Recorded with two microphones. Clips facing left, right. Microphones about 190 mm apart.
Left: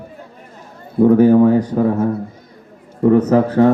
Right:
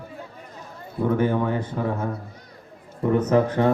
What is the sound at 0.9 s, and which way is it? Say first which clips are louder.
Speech: left 12 dB; 40° left (ahead or behind).